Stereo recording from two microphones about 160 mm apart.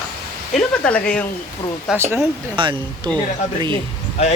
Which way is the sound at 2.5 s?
30° right (ahead or behind).